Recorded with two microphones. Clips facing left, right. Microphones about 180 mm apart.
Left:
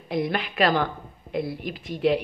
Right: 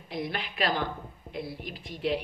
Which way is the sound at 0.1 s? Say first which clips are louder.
Left 8 dB; 70° left (ahead or behind).